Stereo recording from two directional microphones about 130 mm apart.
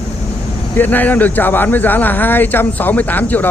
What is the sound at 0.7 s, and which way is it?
A man's voice, 15° left (ahead or behind).